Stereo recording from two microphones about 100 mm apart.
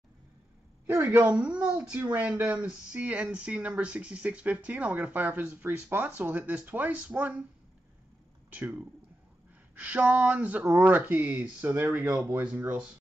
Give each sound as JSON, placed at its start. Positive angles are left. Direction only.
{"t": 0.8, "sound": "speech", "side_deg": -20}
{"t": 8.5, "sound": "speech", "side_deg": -15}